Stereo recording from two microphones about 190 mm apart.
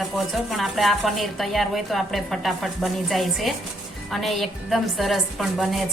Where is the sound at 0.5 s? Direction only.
Centre (ahead or behind).